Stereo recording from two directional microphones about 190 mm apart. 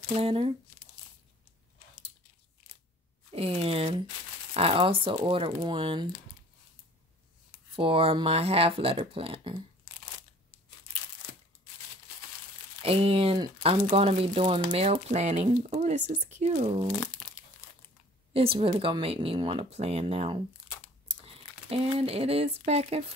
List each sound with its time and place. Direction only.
0.1 s speech: 30° right (ahead or behind)
3.3 s speech: 30° right (ahead or behind)
7.7 s speech: 30° right (ahead or behind)
12.8 s speech: 30° right (ahead or behind)
18.3 s speech: 30° right (ahead or behind)
21.6 s speech: 30° right (ahead or behind)